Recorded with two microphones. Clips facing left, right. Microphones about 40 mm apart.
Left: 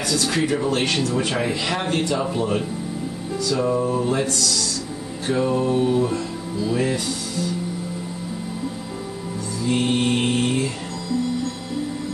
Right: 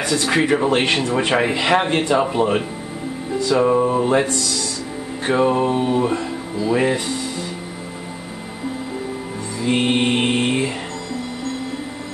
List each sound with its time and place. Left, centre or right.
0.1 s a man's voice: right
3.3 s music: right
5.2 s a man's voice: right
6.7 s music: right
9.6 s a man's voice: right